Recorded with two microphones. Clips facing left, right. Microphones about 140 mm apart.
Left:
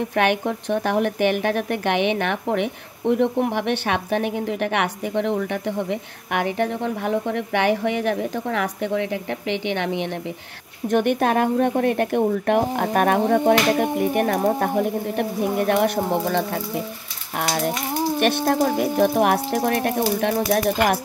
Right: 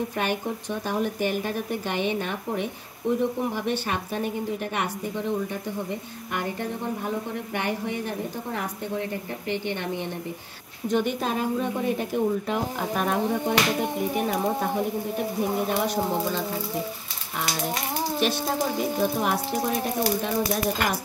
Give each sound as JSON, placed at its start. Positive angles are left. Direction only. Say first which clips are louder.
{"t": 0.1, "sound": "a woman's voice", "louder": "left 7 dB", "side_deg": 70}
{"t": 10.9, "sound": "speech", "louder": "left 6 dB", "side_deg": 60}
{"t": 18.2, "sound": "speech", "louder": "left 7 dB", "side_deg": 60}